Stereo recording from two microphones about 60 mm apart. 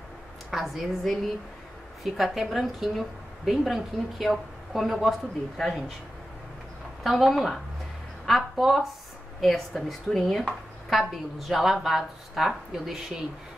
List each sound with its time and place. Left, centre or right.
0.5 s a woman's voice: centre
7.0 s a woman's voice: centre